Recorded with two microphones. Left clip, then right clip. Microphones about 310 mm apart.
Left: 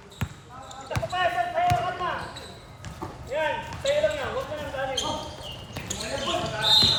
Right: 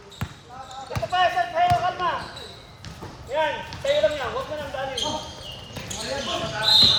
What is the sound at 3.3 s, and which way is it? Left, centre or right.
Basketball bounce, centre.